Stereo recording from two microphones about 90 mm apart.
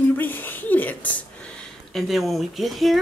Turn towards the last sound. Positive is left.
turn(degrees=0)  # may be behind; listen again after turning